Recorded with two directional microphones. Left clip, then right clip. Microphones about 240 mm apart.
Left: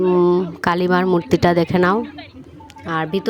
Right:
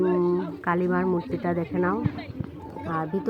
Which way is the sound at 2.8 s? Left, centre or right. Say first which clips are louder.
Left 7 dB; left.